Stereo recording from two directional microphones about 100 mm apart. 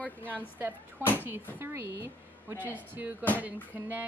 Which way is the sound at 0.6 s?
20° right (ahead or behind).